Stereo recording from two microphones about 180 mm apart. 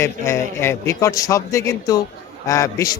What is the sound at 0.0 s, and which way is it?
A man's voice, 15° left (ahead or behind).